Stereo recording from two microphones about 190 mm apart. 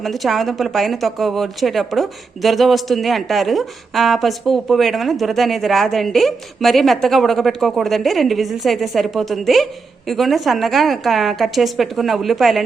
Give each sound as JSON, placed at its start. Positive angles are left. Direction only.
{"t": 0.0, "sound": "speech", "side_deg": 0}